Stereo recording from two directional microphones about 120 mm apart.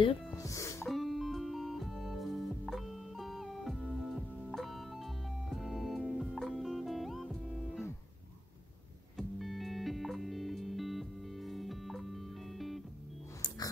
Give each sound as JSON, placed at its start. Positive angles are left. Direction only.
{"t": 0.4, "sound": "music", "side_deg": 25}
{"t": 0.8, "sound": "music", "side_deg": 0}
{"t": 9.1, "sound": "music", "side_deg": 0}